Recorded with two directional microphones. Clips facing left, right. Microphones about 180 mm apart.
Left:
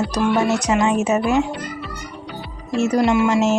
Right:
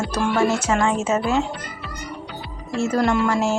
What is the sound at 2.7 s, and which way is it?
Speech, 20° left (ahead or behind).